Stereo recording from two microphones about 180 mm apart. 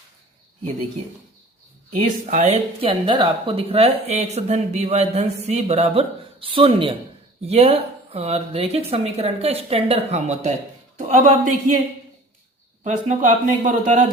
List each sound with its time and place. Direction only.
2.2 s speech: 40° right (ahead or behind)
12.8 s speech: 45° right (ahead or behind)